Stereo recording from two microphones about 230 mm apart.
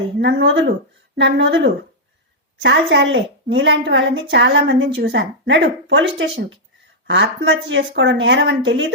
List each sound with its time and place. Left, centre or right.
0.2 s a woman's voice: right